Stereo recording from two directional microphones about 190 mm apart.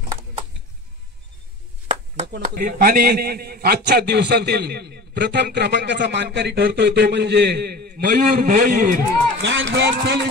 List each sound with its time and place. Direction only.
2.3 s a man's voice: 50° right (ahead or behind)
9.4 s speech: 75° right (ahead or behind)